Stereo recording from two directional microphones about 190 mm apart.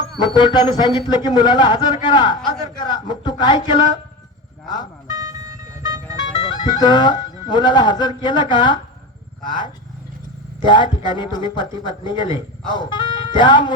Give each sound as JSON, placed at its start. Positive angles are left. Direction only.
{"t": 0.2, "sound": "a man's voice", "side_deg": 20}
{"t": 5.1, "sound": "vehicle", "side_deg": -20}
{"t": 6.5, "sound": "a man's voice", "side_deg": 25}